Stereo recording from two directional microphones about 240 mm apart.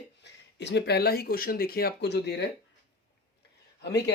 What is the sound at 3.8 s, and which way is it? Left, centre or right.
Speech, left.